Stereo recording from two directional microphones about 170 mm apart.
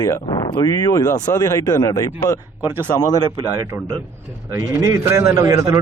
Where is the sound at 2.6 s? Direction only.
10° right (ahead or behind).